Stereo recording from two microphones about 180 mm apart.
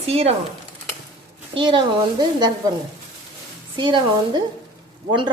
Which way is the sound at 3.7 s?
25° right (ahead or behind).